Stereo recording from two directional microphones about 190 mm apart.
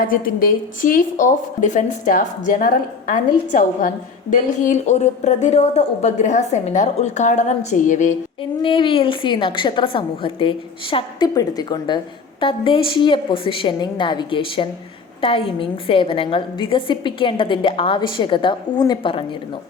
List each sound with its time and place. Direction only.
0.0 s a woman's voice: 50° left (ahead or behind)
8.4 s a woman's voice: 25° left (ahead or behind)